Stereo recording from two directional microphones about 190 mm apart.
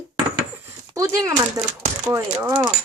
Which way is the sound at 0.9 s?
15° right (ahead or behind).